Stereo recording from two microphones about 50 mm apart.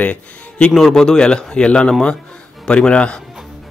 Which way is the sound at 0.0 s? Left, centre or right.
Left.